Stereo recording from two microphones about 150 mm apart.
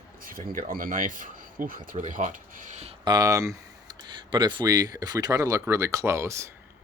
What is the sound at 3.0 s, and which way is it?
Speech, 20° right (ahead or behind).